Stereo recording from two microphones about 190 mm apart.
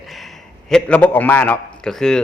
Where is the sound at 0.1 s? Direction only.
Centre (ahead or behind).